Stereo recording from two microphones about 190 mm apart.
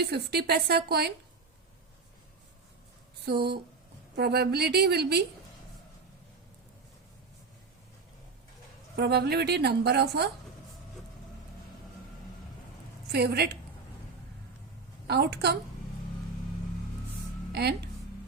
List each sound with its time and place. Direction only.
0.0 s a woman's voice: 55° right (ahead or behind)
3.2 s a woman's voice: 60° right (ahead or behind)
9.0 s a woman's voice: 60° right (ahead or behind)
13.1 s a woman's voice: 55° right (ahead or behind)
15.0 s a woman's voice: 60° right (ahead or behind)
17.5 s speech: 60° right (ahead or behind)